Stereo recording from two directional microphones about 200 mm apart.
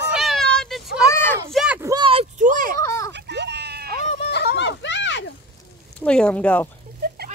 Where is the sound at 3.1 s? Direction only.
60° right (ahead or behind).